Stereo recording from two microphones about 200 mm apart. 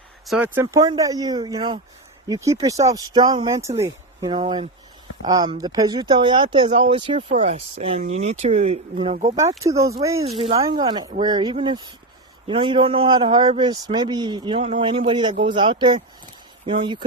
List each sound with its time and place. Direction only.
0.3 s speech: 10° right (ahead or behind)
4.3 s a man's voice: 25° right (ahead or behind)
7.3 s speech: 35° right (ahead or behind)
9.3 s speech: 15° right (ahead or behind)
10.2 s speech: 30° right (ahead or behind)
10.6 s a man's voice: 20° right (ahead or behind)